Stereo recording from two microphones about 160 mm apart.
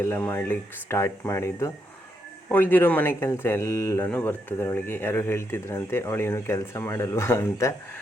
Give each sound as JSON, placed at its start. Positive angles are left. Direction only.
{"t": 0.0, "sound": "speech", "side_deg": 15}